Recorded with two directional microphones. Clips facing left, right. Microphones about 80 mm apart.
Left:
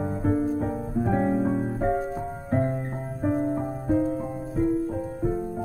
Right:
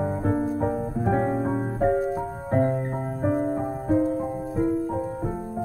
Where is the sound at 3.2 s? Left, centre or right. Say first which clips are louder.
Even; right.